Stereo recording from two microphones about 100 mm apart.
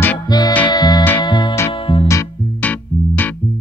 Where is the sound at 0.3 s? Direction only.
45° left (ahead or behind).